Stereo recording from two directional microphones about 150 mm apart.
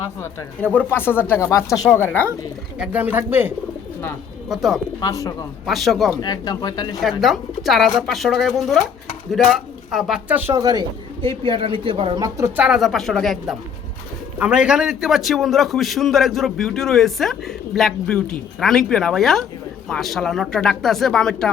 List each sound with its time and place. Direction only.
0.0 s speech: 20° left (ahead or behind)
2.7 s speech: 10° right (ahead or behind)
4.4 s a man's voice: centre (ahead or behind)
4.9 s speech: 25° left (ahead or behind)
5.6 s a man's voice: centre (ahead or behind)
6.2 s speech: 25° left (ahead or behind)
7.0 s a man's voice: centre (ahead or behind)
10.6 s a man's voice: 25° right (ahead or behind)
11.2 s speech: 35° right (ahead or behind)
12.5 s a man's voice: 5° right (ahead or behind)